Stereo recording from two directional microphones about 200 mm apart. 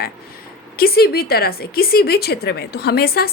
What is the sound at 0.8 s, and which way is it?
A woman's voice, 50° left (ahead or behind).